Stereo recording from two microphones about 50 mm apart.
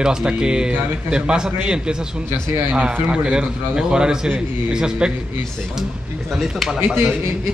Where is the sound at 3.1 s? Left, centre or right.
Centre.